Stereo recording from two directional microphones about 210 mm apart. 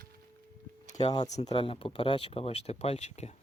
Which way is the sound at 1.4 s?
20° left (ahead or behind).